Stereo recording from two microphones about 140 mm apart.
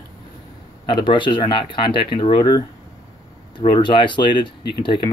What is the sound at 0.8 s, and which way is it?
Speech, 35° left (ahead or behind).